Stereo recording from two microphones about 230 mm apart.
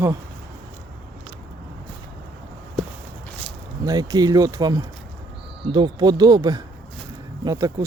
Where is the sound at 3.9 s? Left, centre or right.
Centre.